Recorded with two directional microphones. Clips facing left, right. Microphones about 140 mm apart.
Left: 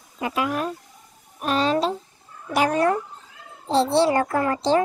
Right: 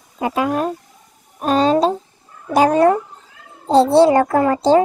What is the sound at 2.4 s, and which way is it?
Speech, 25° right (ahead or behind).